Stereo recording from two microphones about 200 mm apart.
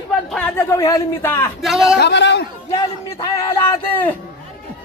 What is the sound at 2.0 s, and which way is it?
Speech, 60° left (ahead or behind).